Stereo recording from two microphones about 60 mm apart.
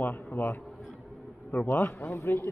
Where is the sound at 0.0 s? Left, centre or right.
Left.